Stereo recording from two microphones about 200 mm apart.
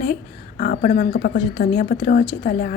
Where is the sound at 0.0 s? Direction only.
40° left (ahead or behind).